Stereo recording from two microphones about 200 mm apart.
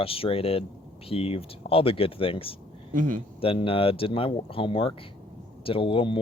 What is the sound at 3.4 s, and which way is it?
Speech, 25° left (ahead or behind).